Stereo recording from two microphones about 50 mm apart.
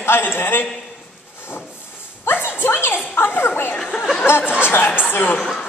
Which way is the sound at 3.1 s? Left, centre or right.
Left.